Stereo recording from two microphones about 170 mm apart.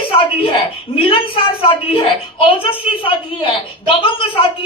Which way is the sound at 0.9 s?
30° left (ahead or behind).